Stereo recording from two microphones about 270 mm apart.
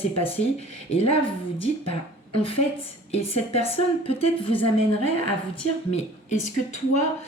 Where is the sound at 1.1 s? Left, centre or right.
Left.